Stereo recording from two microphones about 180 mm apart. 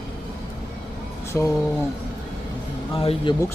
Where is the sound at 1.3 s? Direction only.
15° left (ahead or behind).